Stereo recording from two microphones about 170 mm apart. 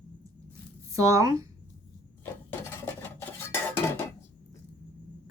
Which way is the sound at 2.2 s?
15° left (ahead or behind).